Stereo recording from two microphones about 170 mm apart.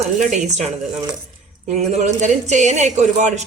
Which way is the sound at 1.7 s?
40° right (ahead or behind).